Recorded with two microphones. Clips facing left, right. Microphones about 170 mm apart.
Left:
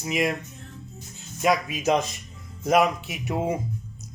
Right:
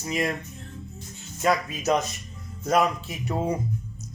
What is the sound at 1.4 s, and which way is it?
Speech, 15° left (ahead or behind).